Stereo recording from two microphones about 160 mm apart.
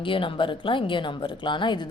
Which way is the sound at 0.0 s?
35° left (ahead or behind).